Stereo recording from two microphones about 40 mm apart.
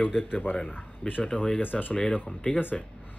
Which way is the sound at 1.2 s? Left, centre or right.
Left.